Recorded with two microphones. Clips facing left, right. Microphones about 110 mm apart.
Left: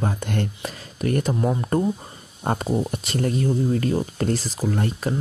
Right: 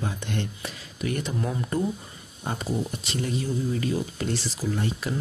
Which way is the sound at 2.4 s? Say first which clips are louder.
Left 6 dB; 50° left (ahead or behind).